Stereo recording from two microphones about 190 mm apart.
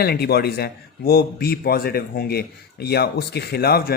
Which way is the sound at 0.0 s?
55° left (ahead or behind).